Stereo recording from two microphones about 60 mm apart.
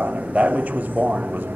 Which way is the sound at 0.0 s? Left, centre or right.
Right.